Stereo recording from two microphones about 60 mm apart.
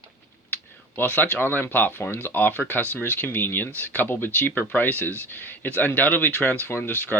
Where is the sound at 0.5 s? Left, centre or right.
Left.